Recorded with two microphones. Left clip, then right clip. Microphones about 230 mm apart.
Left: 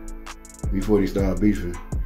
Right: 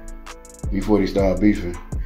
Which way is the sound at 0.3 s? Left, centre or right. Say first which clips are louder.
Right 2 dB; centre.